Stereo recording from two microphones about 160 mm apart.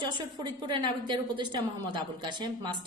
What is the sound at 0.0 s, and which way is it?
A woman's voice, 30° right (ahead or behind).